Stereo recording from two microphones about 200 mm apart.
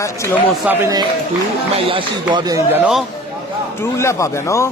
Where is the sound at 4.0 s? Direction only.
15° left (ahead or behind).